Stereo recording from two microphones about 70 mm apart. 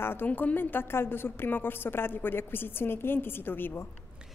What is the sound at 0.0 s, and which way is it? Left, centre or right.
A woman's voice, left.